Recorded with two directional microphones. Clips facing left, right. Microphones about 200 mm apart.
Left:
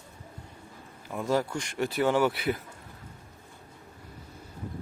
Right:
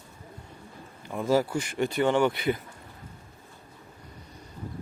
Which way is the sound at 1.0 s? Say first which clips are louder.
Right 3 dB; centre (ahead or behind).